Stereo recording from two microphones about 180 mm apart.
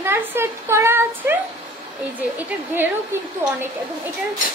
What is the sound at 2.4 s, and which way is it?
Speech, 10° right (ahead or behind).